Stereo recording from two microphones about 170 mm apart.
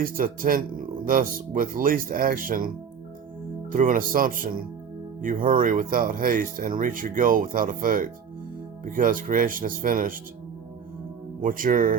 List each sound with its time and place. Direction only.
0.0 s speech: 55° right (ahead or behind)
3.7 s speech: 50° right (ahead or behind)
11.3 s speech: 50° right (ahead or behind)